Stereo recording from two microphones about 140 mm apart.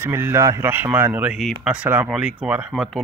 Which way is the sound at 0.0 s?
20° right (ahead or behind).